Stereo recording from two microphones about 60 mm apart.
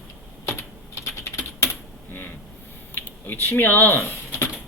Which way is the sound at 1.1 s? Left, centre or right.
Left.